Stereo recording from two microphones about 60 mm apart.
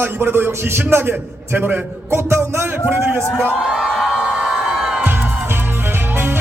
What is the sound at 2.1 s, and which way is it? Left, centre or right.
Speech, right.